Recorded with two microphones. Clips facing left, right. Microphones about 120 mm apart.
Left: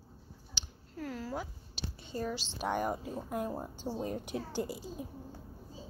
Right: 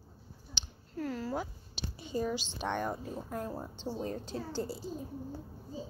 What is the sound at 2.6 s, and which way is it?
A woman's voice, 10° left (ahead or behind).